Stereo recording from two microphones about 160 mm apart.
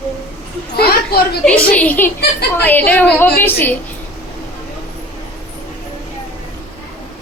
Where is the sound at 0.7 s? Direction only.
75° left (ahead or behind).